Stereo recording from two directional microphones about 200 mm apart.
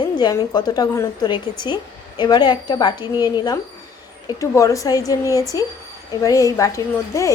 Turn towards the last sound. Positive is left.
turn(degrees=15)  # may be behind; listen again after turning